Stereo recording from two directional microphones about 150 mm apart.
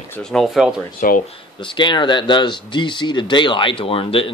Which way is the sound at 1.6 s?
30° left (ahead or behind).